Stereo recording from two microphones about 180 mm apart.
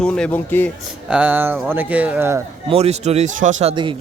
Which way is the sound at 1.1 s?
10° right (ahead or behind).